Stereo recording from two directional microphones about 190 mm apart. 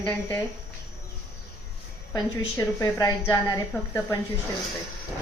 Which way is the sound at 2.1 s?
20° left (ahead or behind).